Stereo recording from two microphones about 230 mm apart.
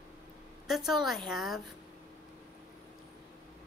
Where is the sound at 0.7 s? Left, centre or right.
Centre.